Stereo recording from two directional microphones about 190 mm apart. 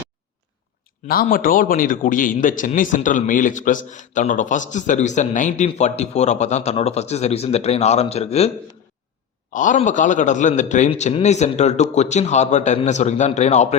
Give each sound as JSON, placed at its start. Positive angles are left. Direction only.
{"t": 1.0, "sound": "a man's voice", "side_deg": 50}
{"t": 9.5, "sound": "a man's voice", "side_deg": 40}